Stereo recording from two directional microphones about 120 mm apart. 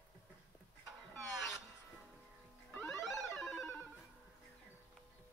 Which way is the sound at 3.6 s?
15° left (ahead or behind).